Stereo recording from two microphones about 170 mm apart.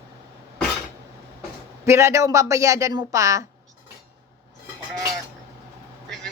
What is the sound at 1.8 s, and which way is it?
Speech, 15° right (ahead or behind).